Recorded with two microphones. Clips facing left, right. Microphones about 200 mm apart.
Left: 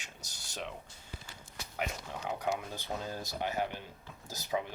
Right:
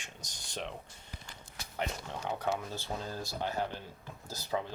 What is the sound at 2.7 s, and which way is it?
Speech, 15° left (ahead or behind).